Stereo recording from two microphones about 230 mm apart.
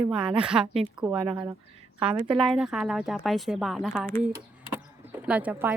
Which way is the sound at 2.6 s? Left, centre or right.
Centre.